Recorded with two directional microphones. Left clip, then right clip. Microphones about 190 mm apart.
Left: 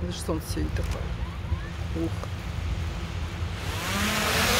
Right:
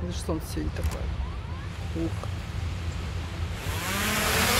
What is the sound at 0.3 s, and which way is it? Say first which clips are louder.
Speech: left 1 dB; centre (ahead or behind).